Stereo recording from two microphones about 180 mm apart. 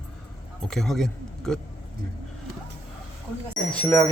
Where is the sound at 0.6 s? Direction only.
Centre (ahead or behind).